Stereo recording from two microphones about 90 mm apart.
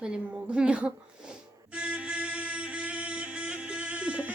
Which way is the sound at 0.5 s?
10° right (ahead or behind).